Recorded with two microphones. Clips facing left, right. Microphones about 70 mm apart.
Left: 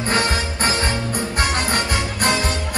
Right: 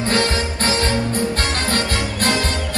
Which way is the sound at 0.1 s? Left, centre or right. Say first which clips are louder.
Even; left.